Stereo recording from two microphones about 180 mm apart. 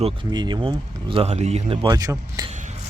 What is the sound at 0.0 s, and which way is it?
Speech, 25° right (ahead or behind).